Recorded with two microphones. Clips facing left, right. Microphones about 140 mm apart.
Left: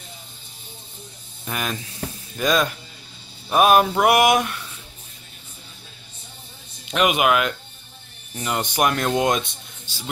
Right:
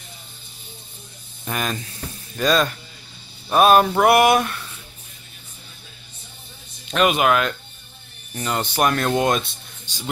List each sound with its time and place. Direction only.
1.4 s speech: 5° left (ahead or behind)
6.9 s speech: 15° left (ahead or behind)